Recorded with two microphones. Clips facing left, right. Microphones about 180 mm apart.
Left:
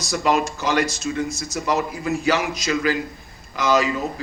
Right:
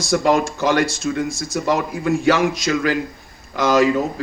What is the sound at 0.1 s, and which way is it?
Speech, 90° right.